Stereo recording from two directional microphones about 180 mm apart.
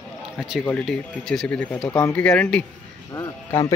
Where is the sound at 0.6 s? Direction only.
5° left (ahead or behind).